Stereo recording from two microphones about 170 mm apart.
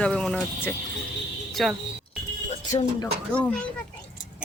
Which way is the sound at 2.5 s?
40° left (ahead or behind).